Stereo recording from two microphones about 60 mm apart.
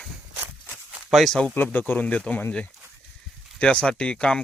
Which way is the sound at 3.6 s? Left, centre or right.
Centre.